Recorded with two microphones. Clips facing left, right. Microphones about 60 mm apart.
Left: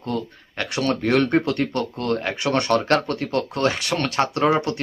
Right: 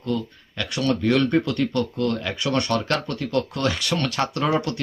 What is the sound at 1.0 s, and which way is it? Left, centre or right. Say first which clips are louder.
A man's voice: left 2 dB; left.